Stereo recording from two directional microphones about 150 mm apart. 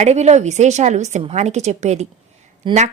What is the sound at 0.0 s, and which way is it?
A woman's voice, 50° right (ahead or behind).